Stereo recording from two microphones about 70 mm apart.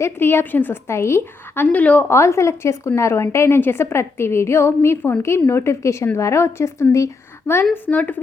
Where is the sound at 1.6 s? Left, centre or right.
Left.